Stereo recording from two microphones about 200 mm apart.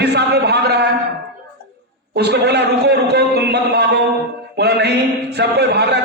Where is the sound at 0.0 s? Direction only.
55° right (ahead or behind).